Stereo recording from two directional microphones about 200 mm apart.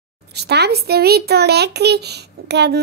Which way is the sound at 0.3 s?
55° right (ahead or behind).